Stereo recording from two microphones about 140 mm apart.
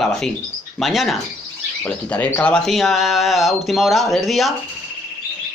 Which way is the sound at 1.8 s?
10° left (ahead or behind).